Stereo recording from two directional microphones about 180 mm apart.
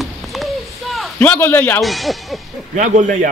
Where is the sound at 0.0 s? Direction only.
Centre (ahead or behind).